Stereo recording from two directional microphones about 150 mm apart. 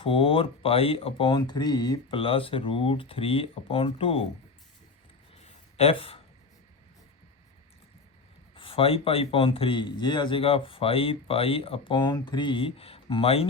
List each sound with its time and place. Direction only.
0.0 s a man's voice: 35° left (ahead or behind)
5.4 s a sound: 40° left (ahead or behind)
8.5 s a man's voice: 35° left (ahead or behind)